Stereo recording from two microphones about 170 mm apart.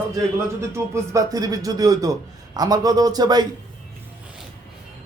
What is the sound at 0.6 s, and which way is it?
Speech, 15° right (ahead or behind).